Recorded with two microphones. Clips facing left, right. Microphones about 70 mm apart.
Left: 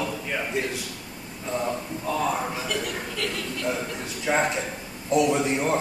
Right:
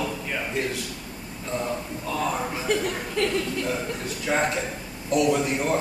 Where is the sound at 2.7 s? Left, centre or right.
Right.